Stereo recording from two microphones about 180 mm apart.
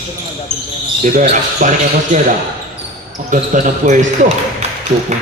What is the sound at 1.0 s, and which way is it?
Speech, 45° right (ahead or behind).